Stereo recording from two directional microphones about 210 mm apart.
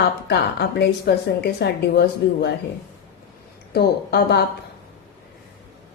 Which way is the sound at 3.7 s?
50° left (ahead or behind).